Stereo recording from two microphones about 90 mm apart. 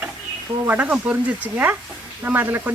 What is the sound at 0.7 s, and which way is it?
Speech, 20° right (ahead or behind).